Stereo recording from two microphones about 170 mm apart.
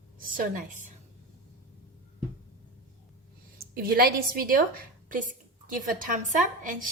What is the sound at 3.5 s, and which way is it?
A woman's voice, 60° right (ahead or behind).